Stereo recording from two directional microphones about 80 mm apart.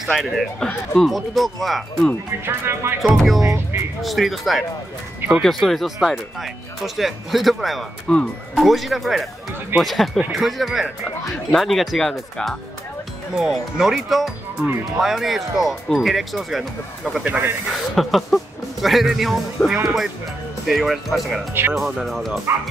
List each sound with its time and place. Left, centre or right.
0.0 s speech: centre
2.4 s speech: right
3.2 s speech: centre
8.1 s speech: centre
8.5 s speech: centre
17.2 s speech: centre
17.6 s speech: centre